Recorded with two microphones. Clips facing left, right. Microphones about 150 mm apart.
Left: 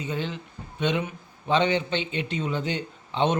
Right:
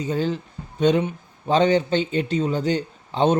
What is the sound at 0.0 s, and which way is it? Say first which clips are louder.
A man's voice: right 7 dB; 40° right (ahead or behind).